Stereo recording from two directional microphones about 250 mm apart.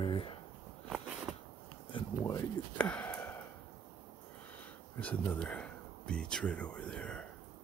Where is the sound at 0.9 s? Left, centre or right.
Centre.